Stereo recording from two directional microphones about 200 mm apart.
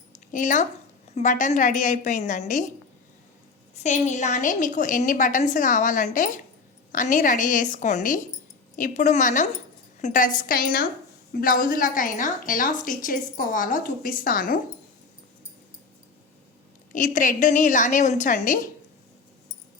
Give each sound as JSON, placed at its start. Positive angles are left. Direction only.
{"t": 0.3, "sound": "a woman's voice", "side_deg": 40}
{"t": 3.8, "sound": "a woman's voice", "side_deg": 35}
{"t": 16.9, "sound": "a woman's voice", "side_deg": 40}